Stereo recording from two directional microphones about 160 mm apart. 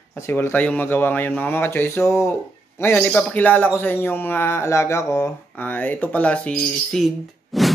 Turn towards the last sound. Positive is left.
turn(degrees=0)  # may be behind; listen again after turning